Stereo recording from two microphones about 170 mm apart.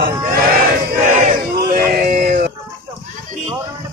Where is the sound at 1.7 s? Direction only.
55° right (ahead or behind).